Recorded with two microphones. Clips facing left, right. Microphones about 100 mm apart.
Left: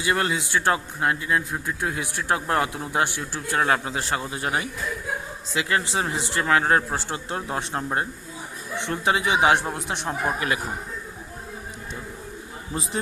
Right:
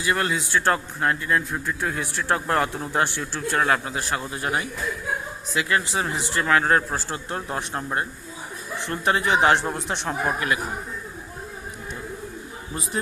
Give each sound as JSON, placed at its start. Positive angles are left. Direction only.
{"t": 0.0, "sound": "speech", "side_deg": 25}
{"t": 3.6, "sound": "speech", "side_deg": 25}